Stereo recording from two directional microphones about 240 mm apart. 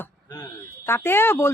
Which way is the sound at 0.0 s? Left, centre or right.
Centre.